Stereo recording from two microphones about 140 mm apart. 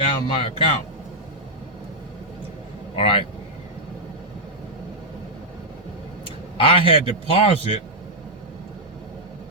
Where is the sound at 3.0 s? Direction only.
40° left (ahead or behind).